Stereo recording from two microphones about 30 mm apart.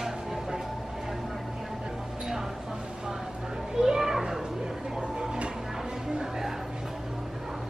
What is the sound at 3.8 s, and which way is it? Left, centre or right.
Children playing, centre.